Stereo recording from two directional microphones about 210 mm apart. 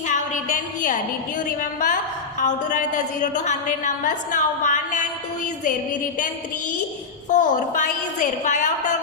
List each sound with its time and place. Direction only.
0.1 s music: 35° left (ahead or behind)
1.5 s a woman's voice: 40° left (ahead or behind)
7.3 s a woman's voice: 35° left (ahead or behind)